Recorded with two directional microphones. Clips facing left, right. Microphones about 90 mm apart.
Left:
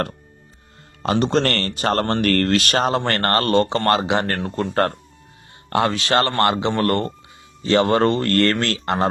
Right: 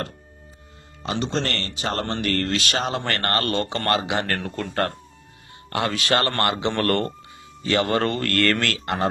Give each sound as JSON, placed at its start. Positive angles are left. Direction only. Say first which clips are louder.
{"t": 1.0, "sound": "speech", "louder": "left 7 dB", "side_deg": 55}
{"t": 3.0, "sound": "speech", "louder": "left 4 dB", "side_deg": 35}